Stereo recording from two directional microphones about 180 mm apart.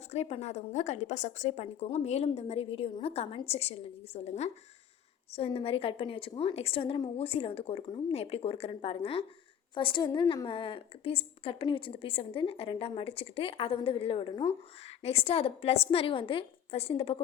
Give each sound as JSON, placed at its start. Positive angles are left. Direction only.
{"t": 0.1, "sound": "a woman's voice", "side_deg": 35}